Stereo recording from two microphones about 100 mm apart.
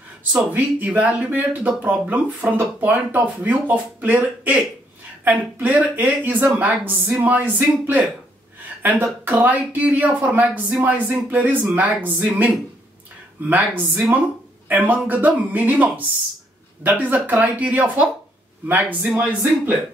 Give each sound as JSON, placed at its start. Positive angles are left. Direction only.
{"t": 0.2, "sound": "speech", "side_deg": -15}